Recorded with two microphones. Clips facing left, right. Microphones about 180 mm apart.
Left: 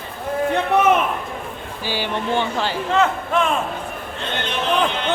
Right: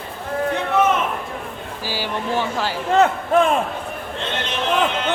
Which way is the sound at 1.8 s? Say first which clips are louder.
Left 2 dB; 5° right (ahead or behind).